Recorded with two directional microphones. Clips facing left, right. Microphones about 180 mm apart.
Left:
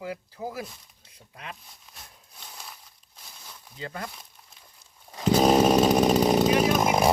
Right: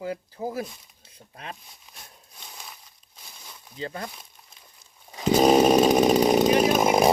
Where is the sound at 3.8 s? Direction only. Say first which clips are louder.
Right 3 dB; 25° right (ahead or behind).